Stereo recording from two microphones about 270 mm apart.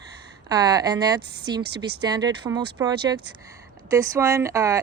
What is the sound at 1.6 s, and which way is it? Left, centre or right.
Speech, right.